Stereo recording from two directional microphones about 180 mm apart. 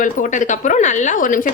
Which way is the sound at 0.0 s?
45° left (ahead or behind).